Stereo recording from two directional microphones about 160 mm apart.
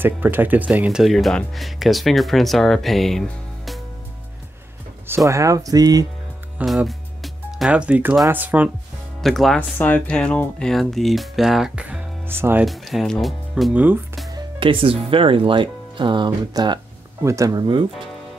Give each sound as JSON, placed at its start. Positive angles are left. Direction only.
{"t": 0.0, "sound": "speech", "side_deg": -10}
{"t": 5.0, "sound": "speech", "side_deg": -15}
{"t": 6.6, "sound": "speech", "side_deg": 0}
{"t": 9.2, "sound": "speech", "side_deg": 0}
{"t": 12.6, "sound": "speech", "side_deg": 0}
{"t": 14.3, "sound": "speech", "side_deg": -30}